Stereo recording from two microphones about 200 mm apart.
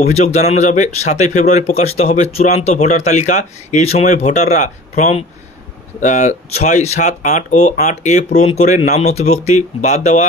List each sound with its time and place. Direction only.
0.1 s speech: 35° left (ahead or behind)